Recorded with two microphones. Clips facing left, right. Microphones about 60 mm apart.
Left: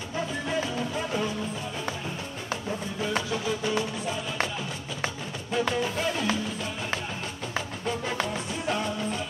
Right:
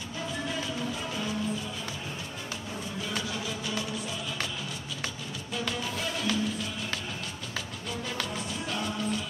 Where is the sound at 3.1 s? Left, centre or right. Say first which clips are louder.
Left 6 dB; left.